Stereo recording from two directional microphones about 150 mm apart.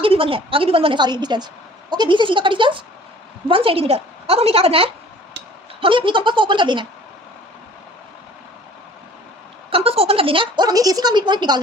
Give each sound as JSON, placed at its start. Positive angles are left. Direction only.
{"t": 0.0, "sound": "a woman's voice", "side_deg": -35}
{"t": 9.6, "sound": "a woman's voice", "side_deg": -40}